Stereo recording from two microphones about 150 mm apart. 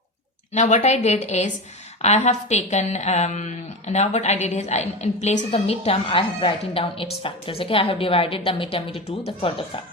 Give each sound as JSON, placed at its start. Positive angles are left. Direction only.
{"t": 0.5, "sound": "a woman's voice", "side_deg": 50}